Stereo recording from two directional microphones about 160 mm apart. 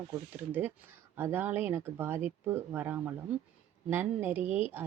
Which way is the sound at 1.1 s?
15° right (ahead or behind).